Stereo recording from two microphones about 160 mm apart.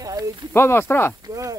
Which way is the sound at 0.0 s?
20° right (ahead or behind).